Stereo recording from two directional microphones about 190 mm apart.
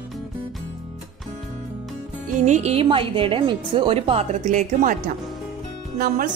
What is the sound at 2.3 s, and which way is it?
A woman's voice, 40° right (ahead or behind).